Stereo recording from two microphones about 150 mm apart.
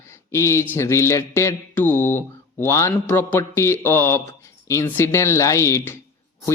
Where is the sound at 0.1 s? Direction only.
20° left (ahead or behind).